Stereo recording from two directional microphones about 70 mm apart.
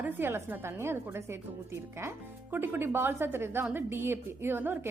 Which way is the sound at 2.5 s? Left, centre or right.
Right.